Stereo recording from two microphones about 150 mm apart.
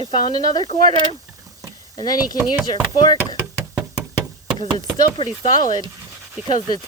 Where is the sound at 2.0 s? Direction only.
25° left (ahead or behind).